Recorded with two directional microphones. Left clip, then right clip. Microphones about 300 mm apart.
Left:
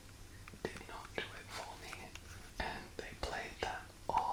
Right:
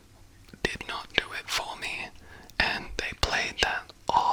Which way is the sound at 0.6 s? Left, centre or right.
Right.